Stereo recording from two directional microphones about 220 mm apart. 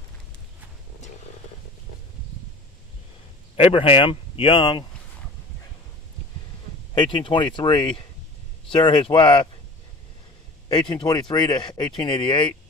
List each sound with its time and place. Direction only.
3.5 s speech: 25° left (ahead or behind)
7.0 s speech: 20° left (ahead or behind)
10.7 s speech: 20° left (ahead or behind)